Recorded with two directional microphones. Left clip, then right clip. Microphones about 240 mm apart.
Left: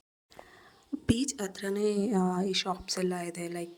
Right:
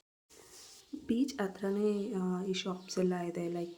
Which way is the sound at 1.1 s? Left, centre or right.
Left.